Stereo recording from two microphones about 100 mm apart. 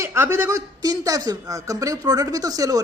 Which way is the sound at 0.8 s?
35° right (ahead or behind).